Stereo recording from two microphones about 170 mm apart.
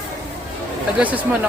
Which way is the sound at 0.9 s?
10° right (ahead or behind).